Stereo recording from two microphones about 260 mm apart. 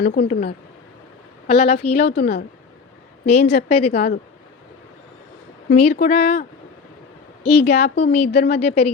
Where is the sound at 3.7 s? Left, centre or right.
Left.